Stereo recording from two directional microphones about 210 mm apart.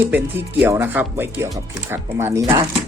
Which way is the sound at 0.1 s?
10° right (ahead or behind).